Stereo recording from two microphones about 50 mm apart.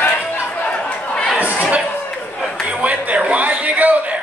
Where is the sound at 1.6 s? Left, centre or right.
Right.